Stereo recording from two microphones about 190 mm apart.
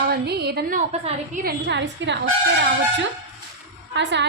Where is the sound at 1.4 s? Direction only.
65° right (ahead or behind).